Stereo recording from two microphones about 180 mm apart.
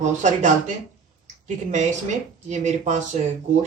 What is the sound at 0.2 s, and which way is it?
Speech, 40° right (ahead or behind).